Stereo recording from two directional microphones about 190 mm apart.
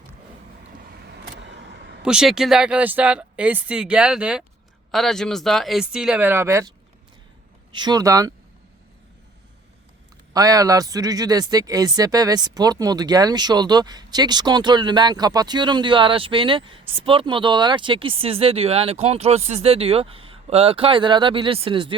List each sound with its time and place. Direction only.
1.0 s vehicle: 65° right (ahead or behind)
2.0 s speech: 5° right (ahead or behind)
7.7 s speech: 20° right (ahead or behind)
10.3 s speech: 20° right (ahead or behind)